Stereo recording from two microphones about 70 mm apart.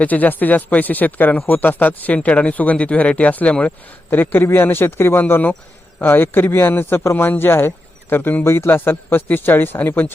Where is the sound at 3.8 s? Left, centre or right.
Left.